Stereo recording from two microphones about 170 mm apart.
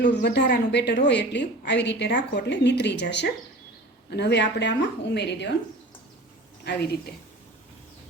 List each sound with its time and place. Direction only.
0.0 s a woman's voice: 80° left